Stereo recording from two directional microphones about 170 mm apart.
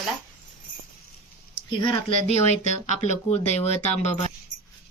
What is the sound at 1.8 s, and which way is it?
Speech, 30° left (ahead or behind).